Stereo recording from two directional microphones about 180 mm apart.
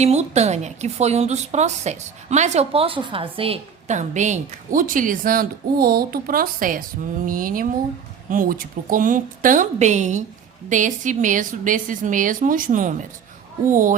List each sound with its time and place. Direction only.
0.0 s a woman's voice: 35° right (ahead or behind)